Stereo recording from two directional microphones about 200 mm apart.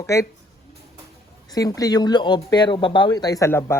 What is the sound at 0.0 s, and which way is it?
Speech, 15° left (ahead or behind).